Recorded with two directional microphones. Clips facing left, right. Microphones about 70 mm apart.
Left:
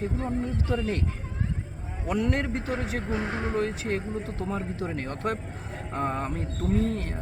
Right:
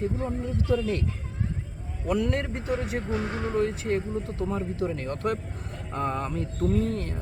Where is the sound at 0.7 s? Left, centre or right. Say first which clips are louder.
Right 4 dB; left.